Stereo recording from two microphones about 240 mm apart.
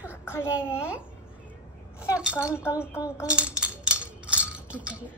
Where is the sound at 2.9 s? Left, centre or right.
Centre.